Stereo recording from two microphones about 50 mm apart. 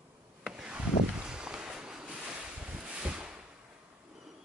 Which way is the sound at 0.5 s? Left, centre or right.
Centre.